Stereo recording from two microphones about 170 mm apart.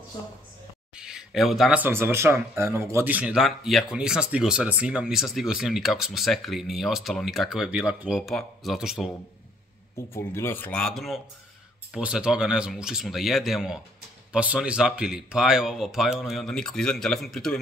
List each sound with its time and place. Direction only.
0.9 s speech: 5° right (ahead or behind)
10.1 s speech: 15° left (ahead or behind)